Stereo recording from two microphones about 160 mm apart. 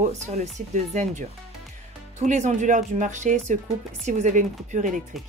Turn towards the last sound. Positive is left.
turn(degrees=-50)  # may be behind; listen again after turning